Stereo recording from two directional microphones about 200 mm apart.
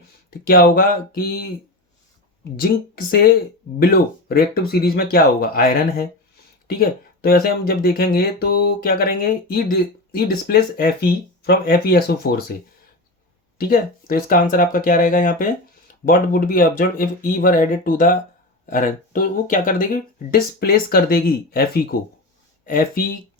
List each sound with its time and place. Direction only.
0.3 s speech: 45° left (ahead or behind)
3.8 s speech: 50° left (ahead or behind)
13.6 s speech: 50° left (ahead or behind)